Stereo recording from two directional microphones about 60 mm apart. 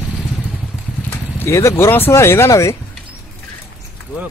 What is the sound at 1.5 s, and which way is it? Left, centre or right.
Speech, left.